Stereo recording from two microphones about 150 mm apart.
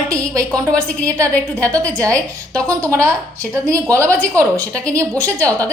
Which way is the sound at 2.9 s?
20° right (ahead or behind).